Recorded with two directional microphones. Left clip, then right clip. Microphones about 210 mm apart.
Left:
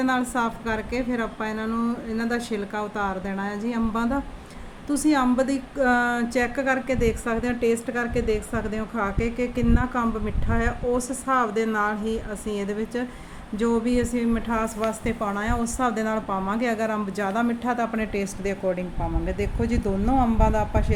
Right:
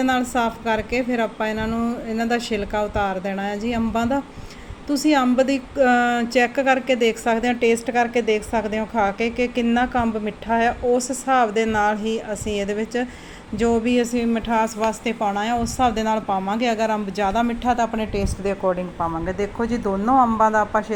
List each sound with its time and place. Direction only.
0.0 s a woman's voice: 5° right (ahead or behind)
12.5 s speech: 30° left (ahead or behind)
13.6 s a woman's voice: 10° right (ahead or behind)